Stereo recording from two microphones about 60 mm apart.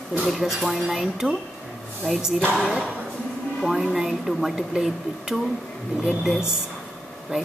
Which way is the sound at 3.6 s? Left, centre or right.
Centre.